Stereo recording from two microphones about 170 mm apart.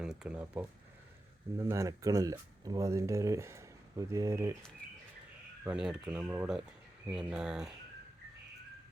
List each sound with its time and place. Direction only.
0.0 s speech: 5° right (ahead or behind)
5.6 s speech: 5° right (ahead or behind)